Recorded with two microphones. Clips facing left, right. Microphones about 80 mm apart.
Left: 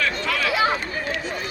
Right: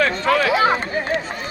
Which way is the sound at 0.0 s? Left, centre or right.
Right.